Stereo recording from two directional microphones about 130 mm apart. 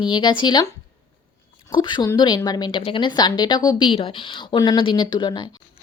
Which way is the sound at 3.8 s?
45° left (ahead or behind).